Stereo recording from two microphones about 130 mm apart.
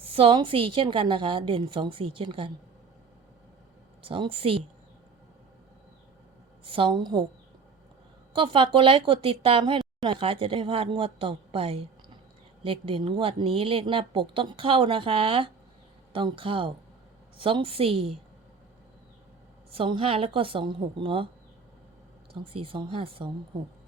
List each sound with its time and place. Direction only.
0.0 s speech: 45° right (ahead or behind)
4.0 s speech: 45° right (ahead or behind)
6.7 s a woman's voice: 40° right (ahead or behind)
8.3 s a woman's voice: 40° right (ahead or behind)
19.7 s speech: 45° right (ahead or behind)
22.3 s speech: 45° right (ahead or behind)